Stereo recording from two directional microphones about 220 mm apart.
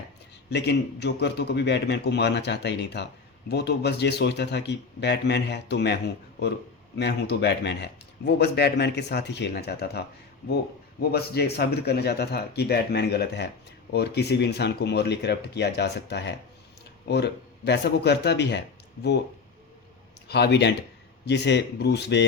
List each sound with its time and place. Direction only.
0.5 s a man's voice: 50° left (ahead or behind)
11.0 s a man's voice: 45° left (ahead or behind)
20.2 s a man's voice: 50° left (ahead or behind)